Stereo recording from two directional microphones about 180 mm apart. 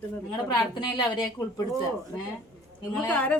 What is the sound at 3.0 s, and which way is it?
Speech, 5° left (ahead or behind).